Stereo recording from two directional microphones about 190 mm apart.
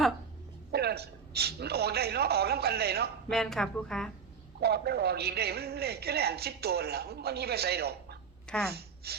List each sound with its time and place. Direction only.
0.7 s a man's voice: 60° right (ahead or behind)
3.2 s a woman's voice: centre (ahead or behind)
4.6 s a man's voice: 60° right (ahead or behind)
8.5 s a woman's voice: 5° left (ahead or behind)
9.0 s a sound: 55° right (ahead or behind)